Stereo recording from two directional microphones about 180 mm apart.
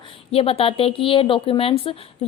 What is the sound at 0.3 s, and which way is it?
Speech, 30° left (ahead or behind).